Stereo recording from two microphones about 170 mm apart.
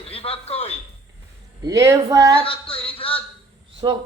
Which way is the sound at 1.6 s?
20° right (ahead or behind).